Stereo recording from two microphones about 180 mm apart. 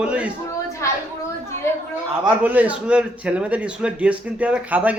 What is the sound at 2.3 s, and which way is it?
A man's voice, 10° right (ahead or behind).